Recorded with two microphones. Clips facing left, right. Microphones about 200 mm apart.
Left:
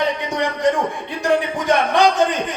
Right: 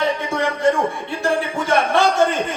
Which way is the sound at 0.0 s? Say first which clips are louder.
Even; 15° left (ahead or behind).